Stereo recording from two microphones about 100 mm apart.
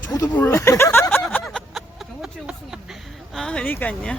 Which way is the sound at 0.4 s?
30° left (ahead or behind).